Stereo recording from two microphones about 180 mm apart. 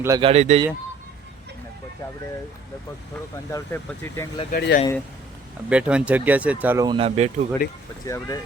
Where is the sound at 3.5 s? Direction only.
15° left (ahead or behind).